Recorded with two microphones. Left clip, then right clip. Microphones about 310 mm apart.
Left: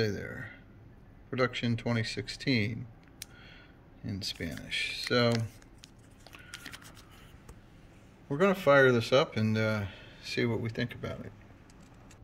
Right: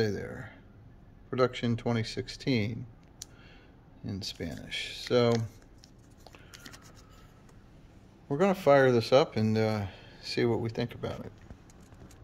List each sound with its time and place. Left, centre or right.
0.0 s speech: centre
4.0 s speech: centre
6.5 s a sound: centre
8.3 s speech: centre